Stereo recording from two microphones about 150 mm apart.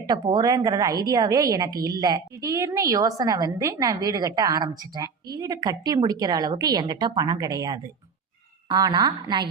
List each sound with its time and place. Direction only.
0.0 s a woman's voice: 30° right (ahead or behind)